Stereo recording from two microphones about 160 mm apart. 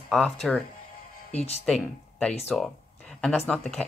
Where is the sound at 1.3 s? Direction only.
40° left (ahead or behind).